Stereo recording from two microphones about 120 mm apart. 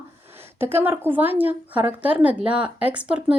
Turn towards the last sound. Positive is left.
turn(degrees=-10)  # may be behind; listen again after turning